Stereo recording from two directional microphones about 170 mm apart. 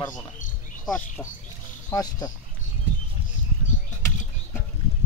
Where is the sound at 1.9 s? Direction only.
20° left (ahead or behind).